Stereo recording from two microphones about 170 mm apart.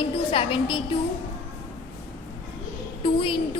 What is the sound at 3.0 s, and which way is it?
Speech, 30° left (ahead or behind).